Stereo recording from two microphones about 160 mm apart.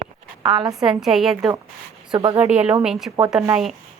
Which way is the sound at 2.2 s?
20° right (ahead or behind).